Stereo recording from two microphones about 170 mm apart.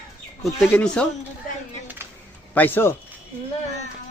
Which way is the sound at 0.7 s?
10° left (ahead or behind).